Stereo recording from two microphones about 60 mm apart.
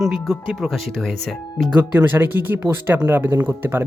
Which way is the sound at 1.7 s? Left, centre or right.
Right.